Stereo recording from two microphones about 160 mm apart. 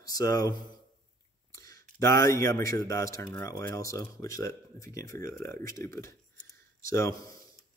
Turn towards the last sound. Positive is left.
turn(degrees=20)  # may be behind; listen again after turning